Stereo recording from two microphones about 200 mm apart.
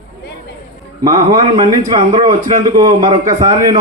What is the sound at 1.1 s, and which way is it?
A man's voice, 20° right (ahead or behind).